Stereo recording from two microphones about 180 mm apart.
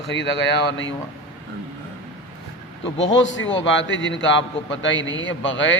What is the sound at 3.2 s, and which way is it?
A man's voice, 90° left.